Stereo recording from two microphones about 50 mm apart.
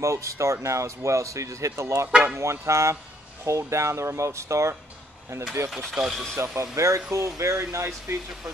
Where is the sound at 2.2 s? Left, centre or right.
Right.